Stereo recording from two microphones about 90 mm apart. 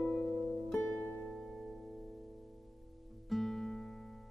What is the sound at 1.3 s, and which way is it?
Music, centre (ahead or behind).